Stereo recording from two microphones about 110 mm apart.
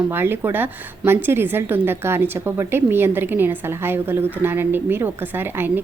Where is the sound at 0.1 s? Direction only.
20° right (ahead or behind).